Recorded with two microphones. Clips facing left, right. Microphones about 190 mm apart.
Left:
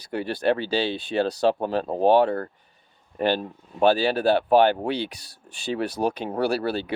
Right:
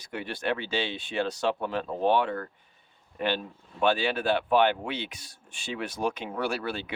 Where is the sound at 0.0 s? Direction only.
35° left (ahead or behind).